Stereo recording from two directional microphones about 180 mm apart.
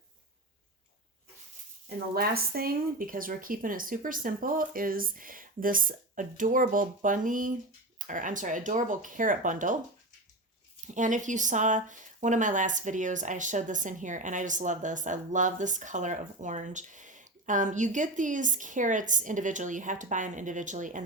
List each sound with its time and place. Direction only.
2.1 s speech: 60° right (ahead or behind)
10.9 s speech: 45° right (ahead or behind)